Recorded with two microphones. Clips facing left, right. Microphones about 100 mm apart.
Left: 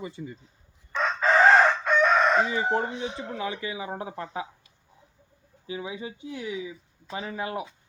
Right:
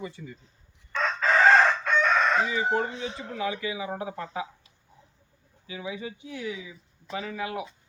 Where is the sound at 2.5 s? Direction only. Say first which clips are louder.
Even; 30° left (ahead or behind).